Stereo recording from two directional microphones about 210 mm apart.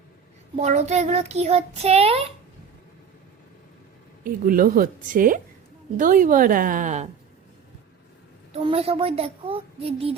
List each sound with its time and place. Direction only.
0.5 s child singing: 30° right (ahead or behind)
4.2 s child singing: 40° right (ahead or behind)
8.5 s a child's voice: 30° right (ahead or behind)